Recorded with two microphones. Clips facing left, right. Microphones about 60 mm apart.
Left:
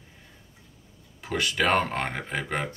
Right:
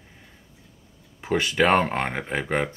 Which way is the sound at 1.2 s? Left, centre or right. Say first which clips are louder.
Right 5 dB; right.